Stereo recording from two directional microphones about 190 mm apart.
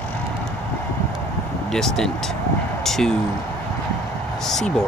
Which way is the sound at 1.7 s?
Centre (ahead or behind).